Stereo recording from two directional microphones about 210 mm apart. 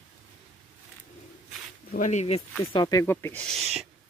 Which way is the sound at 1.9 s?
35° left (ahead or behind).